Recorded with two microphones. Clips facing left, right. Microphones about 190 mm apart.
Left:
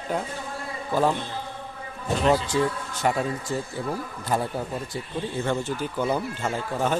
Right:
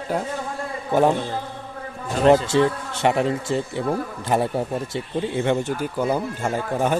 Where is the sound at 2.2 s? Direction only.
45° right (ahead or behind).